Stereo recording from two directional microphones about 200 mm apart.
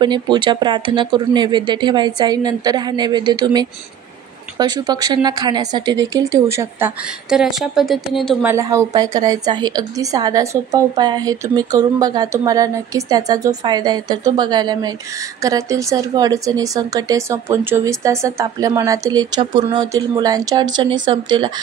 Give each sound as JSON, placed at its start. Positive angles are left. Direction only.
{"t": 0.0, "sound": "a woman's voice", "side_deg": -20}
{"t": 7.2, "sound": "a woman's voice", "side_deg": 0}